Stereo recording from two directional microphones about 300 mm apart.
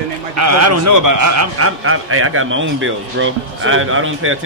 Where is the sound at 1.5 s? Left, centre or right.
Right.